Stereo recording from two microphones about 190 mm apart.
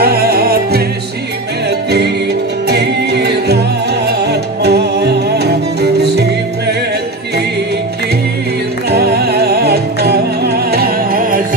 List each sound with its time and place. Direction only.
0.0 s music: 55° right (ahead or behind)
2.7 s music: 60° right (ahead or behind)
8.9 s music: 55° right (ahead or behind)